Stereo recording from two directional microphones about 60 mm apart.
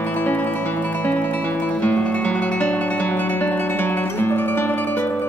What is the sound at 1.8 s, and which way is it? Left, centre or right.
Music, left.